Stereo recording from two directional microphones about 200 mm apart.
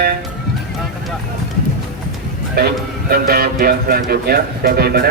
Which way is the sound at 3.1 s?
50° right (ahead or behind).